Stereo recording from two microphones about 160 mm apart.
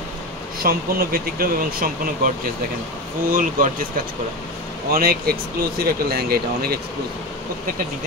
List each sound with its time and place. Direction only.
0.7 s speech: 65° right (ahead or behind)
4.9 s speech: 70° right (ahead or behind)